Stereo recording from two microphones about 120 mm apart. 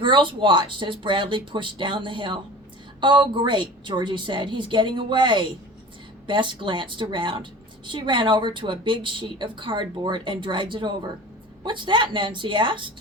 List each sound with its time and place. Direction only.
0.0 s a woman's voice: 40° right (ahead or behind)